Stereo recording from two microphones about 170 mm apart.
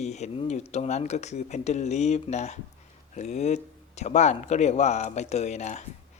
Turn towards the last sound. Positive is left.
turn(degrees=45)  # may be behind; listen again after turning